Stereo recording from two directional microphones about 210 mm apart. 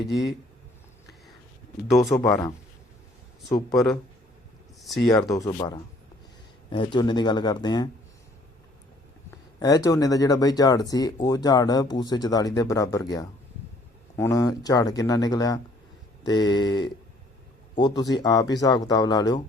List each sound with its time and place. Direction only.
2.2 s speech: 10° left (ahead or behind)
3.7 s speech: centre (ahead or behind)
5.0 s speech: 20° left (ahead or behind)
9.6 s speech: 15° left (ahead or behind)